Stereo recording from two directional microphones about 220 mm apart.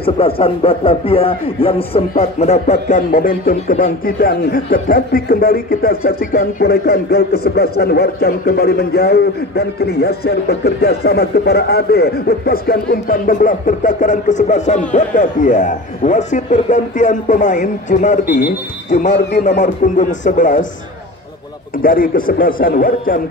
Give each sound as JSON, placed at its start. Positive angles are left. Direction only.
{"t": 0.0, "sound": "speech", "side_deg": 25}
{"t": 19.4, "sound": "speech", "side_deg": 35}
{"t": 21.8, "sound": "speech", "side_deg": 40}